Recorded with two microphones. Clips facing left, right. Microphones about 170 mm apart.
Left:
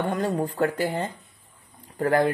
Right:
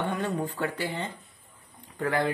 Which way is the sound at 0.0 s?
40° left (ahead or behind).